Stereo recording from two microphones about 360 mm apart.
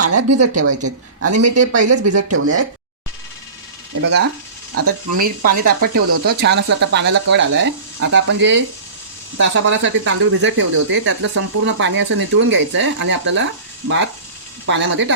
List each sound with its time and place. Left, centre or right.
0.0 s speech: right
4.7 s speech: right
5.1 s speech: right